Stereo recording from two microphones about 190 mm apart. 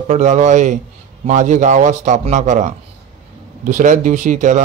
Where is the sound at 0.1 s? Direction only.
40° right (ahead or behind).